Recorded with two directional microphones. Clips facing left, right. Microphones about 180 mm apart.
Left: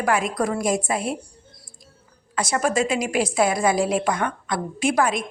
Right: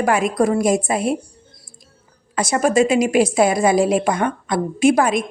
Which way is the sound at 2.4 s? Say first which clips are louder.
Right 6 dB; 15° right (ahead or behind).